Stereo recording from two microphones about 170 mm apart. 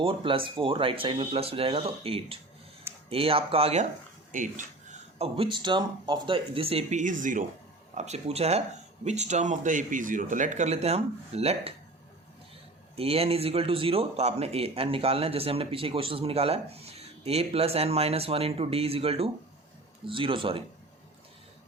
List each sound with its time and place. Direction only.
0.0 s speech: 30° right (ahead or behind)
4.3 s speech: 50° right (ahead or behind)
7.9 s speech: 40° right (ahead or behind)
13.0 s speech: 35° right (ahead or behind)